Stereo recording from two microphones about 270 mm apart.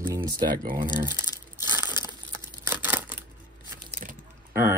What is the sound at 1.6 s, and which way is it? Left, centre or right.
Crumpling, centre.